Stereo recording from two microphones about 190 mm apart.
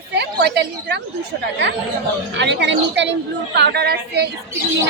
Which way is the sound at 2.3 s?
65° right (ahead or behind).